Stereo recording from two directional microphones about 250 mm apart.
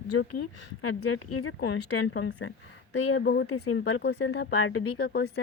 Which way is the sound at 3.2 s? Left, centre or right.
Left.